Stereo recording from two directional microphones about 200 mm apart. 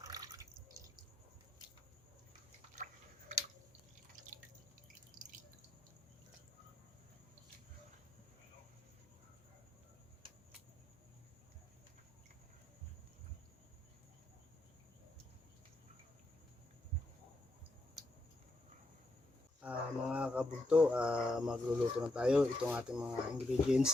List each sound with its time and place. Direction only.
0.0 s drip: 15° right (ahead or behind)
19.6 s speech: 5° right (ahead or behind)